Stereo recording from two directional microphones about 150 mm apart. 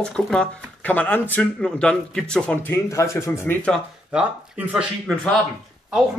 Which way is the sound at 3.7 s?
5° right (ahead or behind).